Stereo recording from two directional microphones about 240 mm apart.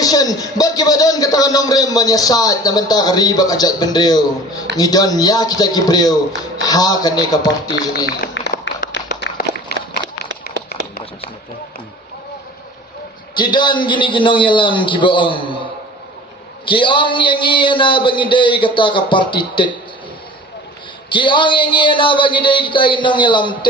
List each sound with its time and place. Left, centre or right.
0.0 s speech: centre
8.0 s a sound: left
9.7 s run: left
10.5 s a sound: left
13.3 s a man's voice: centre
16.6 s a man's voice: left
21.1 s a man's voice: centre